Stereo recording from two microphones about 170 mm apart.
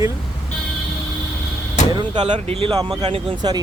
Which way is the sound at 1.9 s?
25° right (ahead or behind).